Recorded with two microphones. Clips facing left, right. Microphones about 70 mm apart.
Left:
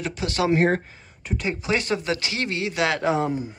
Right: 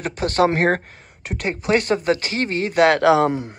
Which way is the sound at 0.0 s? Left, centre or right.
Right.